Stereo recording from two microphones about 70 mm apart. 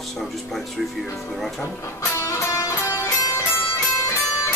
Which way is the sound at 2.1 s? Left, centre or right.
Left.